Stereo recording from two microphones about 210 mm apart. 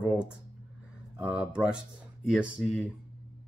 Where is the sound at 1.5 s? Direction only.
5° right (ahead or behind).